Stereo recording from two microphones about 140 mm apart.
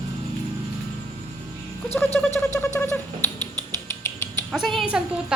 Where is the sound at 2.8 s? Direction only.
15° left (ahead or behind).